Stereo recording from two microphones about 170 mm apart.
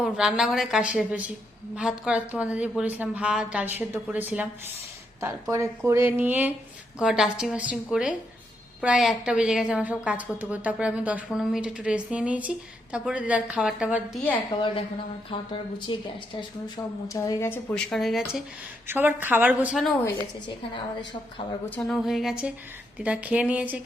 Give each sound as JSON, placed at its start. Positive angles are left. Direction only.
{"t": 0.0, "sound": "a woman's voice", "side_deg": -5}
{"t": 14.3, "sound": "a woman's voice", "side_deg": 30}
{"t": 15.9, "sound": "a woman's voice", "side_deg": 25}
{"t": 17.7, "sound": "a woman's voice", "side_deg": 0}
{"t": 18.9, "sound": "a woman's voice", "side_deg": -10}
{"t": 20.7, "sound": "a woman's voice", "side_deg": 25}
{"t": 21.8, "sound": "a woman's voice", "side_deg": 0}